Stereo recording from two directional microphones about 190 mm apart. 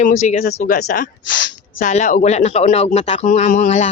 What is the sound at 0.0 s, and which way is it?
Speech, 40° left (ahead or behind).